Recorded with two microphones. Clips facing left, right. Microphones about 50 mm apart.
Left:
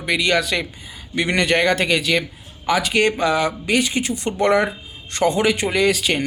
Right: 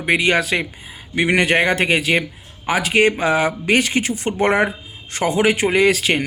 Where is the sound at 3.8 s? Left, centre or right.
Right.